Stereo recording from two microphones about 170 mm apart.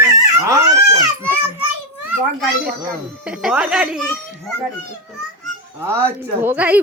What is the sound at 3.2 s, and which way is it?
A child's voice, 5° right (ahead or behind).